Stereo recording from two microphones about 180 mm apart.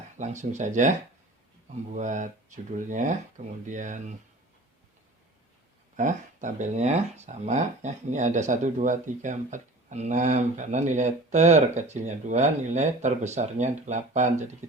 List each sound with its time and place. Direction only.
0.2 s speech: 40° right (ahead or behind)
6.0 s speech: 45° right (ahead or behind)